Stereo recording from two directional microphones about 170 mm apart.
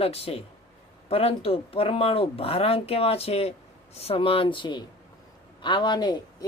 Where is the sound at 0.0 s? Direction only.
35° left (ahead or behind).